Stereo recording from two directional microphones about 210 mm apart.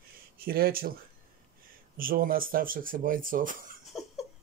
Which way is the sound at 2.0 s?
45° right (ahead or behind).